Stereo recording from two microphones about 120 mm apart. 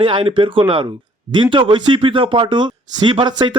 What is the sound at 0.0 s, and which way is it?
Speech, 45° right (ahead or behind).